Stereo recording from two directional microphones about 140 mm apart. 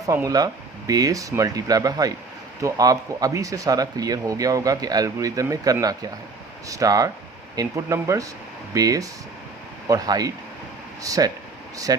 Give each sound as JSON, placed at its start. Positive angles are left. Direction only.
{"t": 0.0, "sound": "speech", "side_deg": -25}